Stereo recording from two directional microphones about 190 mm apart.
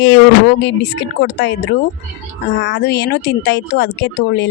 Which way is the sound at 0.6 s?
70° left (ahead or behind).